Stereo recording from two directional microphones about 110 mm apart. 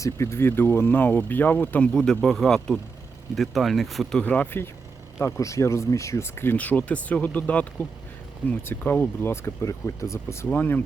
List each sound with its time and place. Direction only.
0.0 s speech: 25° left (ahead or behind)
1.9 s speech: 5° left (ahead or behind)
4.2 s speech: 15° left (ahead or behind)